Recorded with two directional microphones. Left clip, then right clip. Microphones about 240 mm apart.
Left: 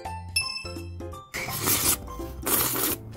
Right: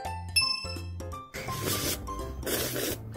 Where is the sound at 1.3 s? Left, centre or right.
Left.